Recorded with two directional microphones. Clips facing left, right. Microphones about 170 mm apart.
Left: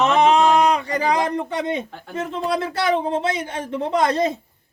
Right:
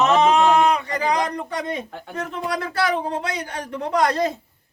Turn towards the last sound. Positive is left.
turn(degrees=25)  # may be behind; listen again after turning